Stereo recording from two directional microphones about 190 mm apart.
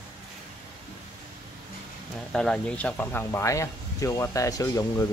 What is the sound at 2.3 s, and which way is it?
Speech, 5° left (ahead or behind).